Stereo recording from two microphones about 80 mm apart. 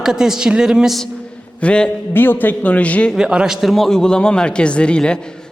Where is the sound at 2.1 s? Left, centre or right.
Left.